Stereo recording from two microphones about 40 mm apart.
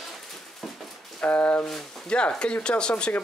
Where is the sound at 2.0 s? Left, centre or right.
Left.